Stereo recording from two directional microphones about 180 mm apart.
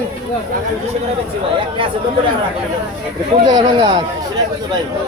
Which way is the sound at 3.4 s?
20° right (ahead or behind).